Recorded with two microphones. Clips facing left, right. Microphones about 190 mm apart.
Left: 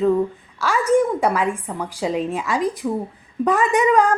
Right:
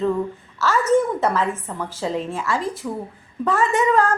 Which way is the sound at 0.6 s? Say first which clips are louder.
Left 1 dB; 10° left (ahead or behind).